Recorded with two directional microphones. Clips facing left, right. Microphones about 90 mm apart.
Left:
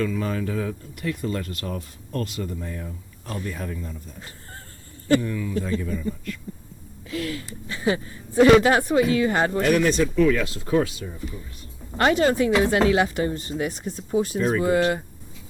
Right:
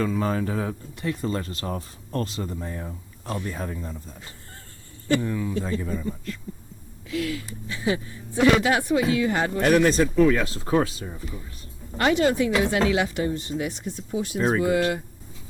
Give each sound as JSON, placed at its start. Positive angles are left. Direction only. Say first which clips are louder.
{"t": 0.0, "sound": "speech", "louder": "right 1 dB", "side_deg": -35}
{"t": 5.2, "sound": "speech", "louder": "even", "side_deg": -25}
{"t": 7.1, "sound": "a woman's voice", "louder": "right 1 dB", "side_deg": 40}
{"t": 9.6, "sound": "speech", "louder": "right 4 dB", "side_deg": -40}
{"t": 11.9, "sound": "speech", "louder": "left 1 dB", "side_deg": 40}